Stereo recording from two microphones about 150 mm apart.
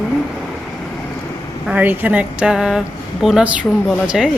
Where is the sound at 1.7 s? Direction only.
10° right (ahead or behind).